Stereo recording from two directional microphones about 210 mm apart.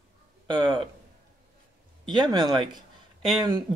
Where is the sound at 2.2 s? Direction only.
20° right (ahead or behind).